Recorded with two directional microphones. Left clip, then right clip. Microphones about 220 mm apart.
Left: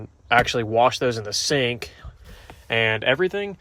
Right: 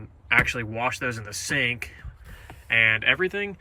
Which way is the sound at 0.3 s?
20° left (ahead or behind).